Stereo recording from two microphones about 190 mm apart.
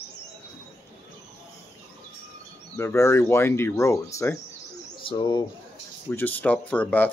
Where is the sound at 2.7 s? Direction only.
15° left (ahead or behind).